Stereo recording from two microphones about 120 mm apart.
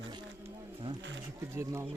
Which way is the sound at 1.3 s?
25° right (ahead or behind).